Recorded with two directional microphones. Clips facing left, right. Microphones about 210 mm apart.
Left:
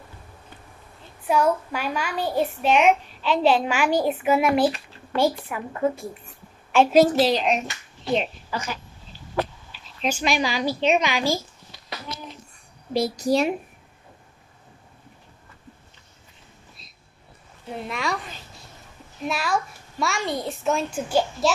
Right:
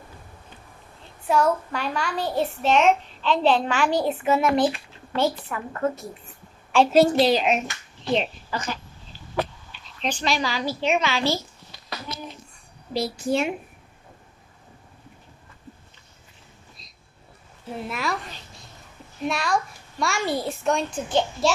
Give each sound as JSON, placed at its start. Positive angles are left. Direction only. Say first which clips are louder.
{"t": 1.2, "sound": "a child's voice", "louder": "even", "side_deg": 5}
{"t": 12.9, "sound": "a woman's voice", "louder": "left 3 dB", "side_deg": 45}
{"t": 17.6, "sound": "a woman's voice", "louder": "even", "side_deg": -5}